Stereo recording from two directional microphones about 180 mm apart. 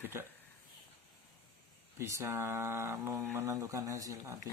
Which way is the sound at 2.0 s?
15° right (ahead or behind).